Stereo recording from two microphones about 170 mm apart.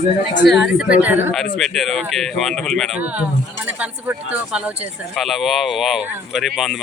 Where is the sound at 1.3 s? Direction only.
Centre (ahead or behind).